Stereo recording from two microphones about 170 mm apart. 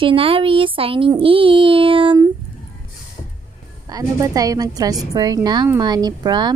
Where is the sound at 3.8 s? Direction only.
20° right (ahead or behind).